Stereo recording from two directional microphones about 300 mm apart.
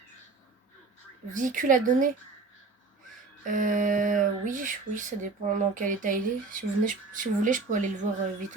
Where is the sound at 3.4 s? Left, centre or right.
Right.